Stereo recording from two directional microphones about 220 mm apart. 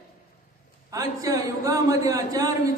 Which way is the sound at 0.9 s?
15° right (ahead or behind).